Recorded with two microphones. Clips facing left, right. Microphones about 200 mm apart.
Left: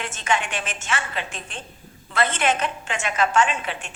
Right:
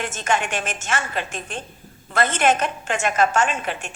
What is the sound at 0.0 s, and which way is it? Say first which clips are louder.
A woman's voice: right 2 dB; 45° right (ahead or behind).